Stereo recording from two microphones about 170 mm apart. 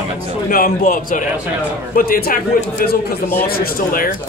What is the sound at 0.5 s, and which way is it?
Speech, 55° left (ahead or behind).